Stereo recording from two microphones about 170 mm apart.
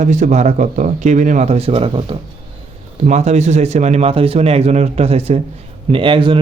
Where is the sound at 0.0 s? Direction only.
45° right (ahead or behind).